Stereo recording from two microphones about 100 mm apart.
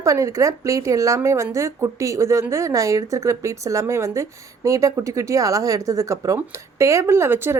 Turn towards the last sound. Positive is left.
turn(degrees=-25)  # may be behind; listen again after turning